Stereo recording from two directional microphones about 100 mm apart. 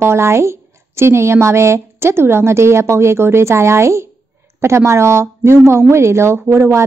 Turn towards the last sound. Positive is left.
turn(degrees=-30)  # may be behind; listen again after turning